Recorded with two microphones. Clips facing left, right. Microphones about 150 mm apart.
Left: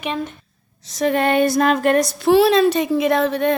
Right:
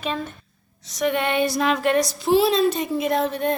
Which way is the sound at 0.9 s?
35° left (ahead or behind).